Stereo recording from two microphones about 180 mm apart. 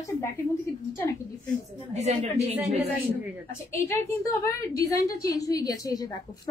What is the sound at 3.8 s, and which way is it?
A woman's voice, 15° left (ahead or behind).